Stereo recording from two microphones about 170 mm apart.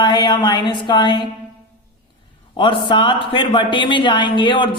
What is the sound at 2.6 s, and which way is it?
Speech, 30° left (ahead or behind).